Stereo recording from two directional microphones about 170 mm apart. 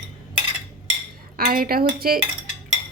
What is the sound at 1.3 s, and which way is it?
Speech, 60° right (ahead or behind).